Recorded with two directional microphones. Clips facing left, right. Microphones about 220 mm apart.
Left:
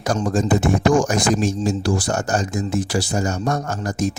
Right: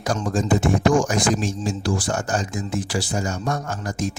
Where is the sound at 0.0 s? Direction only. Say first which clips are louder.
Left 3 dB; 45° left (ahead or behind).